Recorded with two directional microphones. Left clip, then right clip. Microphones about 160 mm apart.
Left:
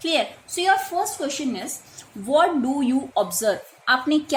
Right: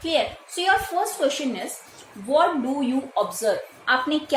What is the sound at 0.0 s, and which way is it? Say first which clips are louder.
Speech: even; 45° left (ahead or behind).